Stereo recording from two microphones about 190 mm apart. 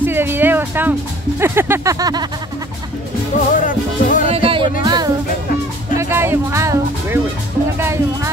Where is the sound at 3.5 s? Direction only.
45° left (ahead or behind).